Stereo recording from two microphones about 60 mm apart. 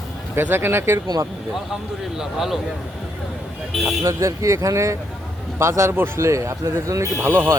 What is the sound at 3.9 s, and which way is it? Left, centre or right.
Speech, right.